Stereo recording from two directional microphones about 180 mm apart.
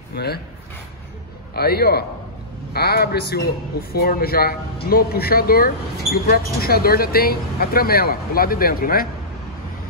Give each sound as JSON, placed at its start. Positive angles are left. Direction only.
{"t": 0.1, "sound": "speech", "side_deg": 65}
{"t": 1.5, "sound": "speech", "side_deg": 60}